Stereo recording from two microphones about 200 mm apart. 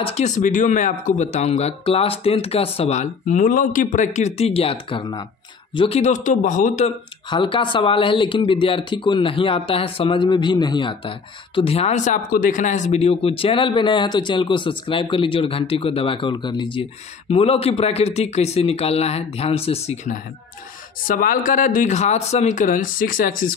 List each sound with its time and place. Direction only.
0.0 s speech: 35° left (ahead or behind)
7.2 s speech: 25° left (ahead or behind)
21.1 s speech: 45° left (ahead or behind)